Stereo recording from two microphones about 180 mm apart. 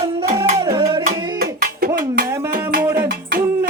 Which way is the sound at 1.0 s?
55° right (ahead or behind).